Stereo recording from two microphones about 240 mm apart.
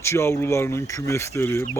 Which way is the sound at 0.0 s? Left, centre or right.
Centre.